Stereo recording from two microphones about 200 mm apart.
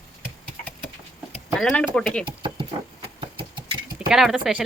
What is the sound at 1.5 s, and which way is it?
Speech, centre (ahead or behind).